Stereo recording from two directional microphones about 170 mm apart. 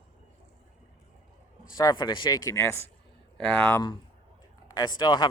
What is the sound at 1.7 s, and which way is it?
Speech, 25° left (ahead or behind).